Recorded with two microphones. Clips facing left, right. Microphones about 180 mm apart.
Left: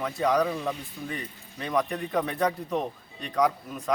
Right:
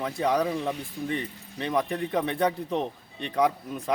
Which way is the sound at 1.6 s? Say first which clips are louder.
Even; 25° right (ahead or behind).